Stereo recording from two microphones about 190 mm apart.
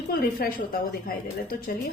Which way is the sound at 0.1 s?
50° left (ahead or behind).